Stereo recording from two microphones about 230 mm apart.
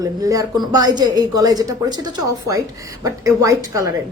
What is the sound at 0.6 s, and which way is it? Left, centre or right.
A woman's voice, centre.